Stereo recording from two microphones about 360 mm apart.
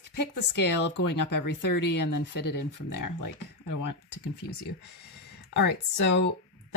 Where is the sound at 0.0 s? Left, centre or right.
Left.